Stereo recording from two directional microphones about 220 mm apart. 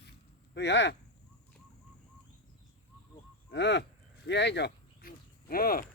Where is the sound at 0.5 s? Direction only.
50° left (ahead or behind).